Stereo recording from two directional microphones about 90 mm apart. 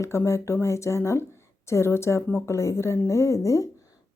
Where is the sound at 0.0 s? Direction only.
35° left (ahead or behind).